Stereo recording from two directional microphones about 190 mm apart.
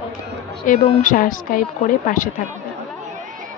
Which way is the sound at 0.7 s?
45° left (ahead or behind).